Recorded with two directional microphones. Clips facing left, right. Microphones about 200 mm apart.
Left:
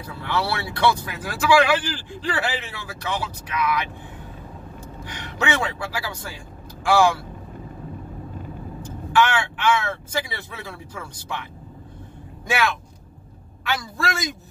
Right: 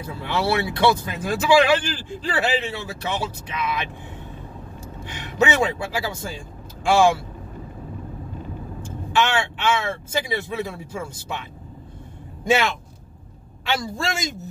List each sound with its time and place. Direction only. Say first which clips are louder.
0.0 s speech: right 2 dB; 20° right (ahead or behind)
5.0 s speech: right 5 dB; 20° right (ahead or behind)
8.8 s speech: left 2 dB; 25° right (ahead or behind)
13.7 s speech: right 1 dB; 25° right (ahead or behind)